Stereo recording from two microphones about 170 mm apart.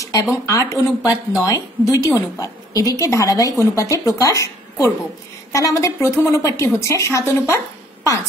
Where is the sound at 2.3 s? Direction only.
20° left (ahead or behind).